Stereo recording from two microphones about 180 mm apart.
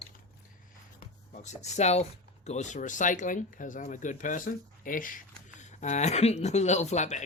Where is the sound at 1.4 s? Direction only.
40° left (ahead or behind).